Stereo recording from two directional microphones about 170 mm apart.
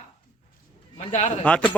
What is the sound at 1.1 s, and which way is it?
Speech, 40° left (ahead or behind).